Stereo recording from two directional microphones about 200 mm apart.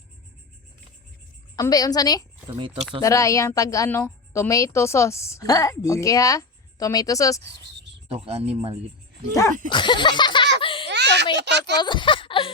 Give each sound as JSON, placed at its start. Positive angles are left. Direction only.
{"t": 1.5, "sound": "speech", "side_deg": 15}
{"t": 2.5, "sound": "speech", "side_deg": -25}
{"t": 3.0, "sound": "a woman's voice", "side_deg": 15}
{"t": 8.0, "sound": "speech", "side_deg": -30}
{"t": 9.3, "sound": "speech", "side_deg": 20}
{"t": 10.6, "sound": "baby laughter", "side_deg": 25}
{"t": 10.8, "sound": "a sound", "side_deg": -60}
{"t": 11.3, "sound": "speech", "side_deg": -60}
{"t": 11.8, "sound": "speech", "side_deg": 25}